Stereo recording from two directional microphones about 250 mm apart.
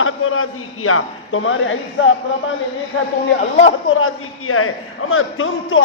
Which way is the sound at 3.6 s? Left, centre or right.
Left.